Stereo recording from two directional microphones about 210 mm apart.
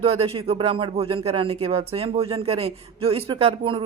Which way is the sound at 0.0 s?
25° right (ahead or behind).